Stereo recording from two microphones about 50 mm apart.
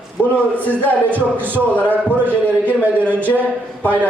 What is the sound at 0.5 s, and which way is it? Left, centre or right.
Speech, left.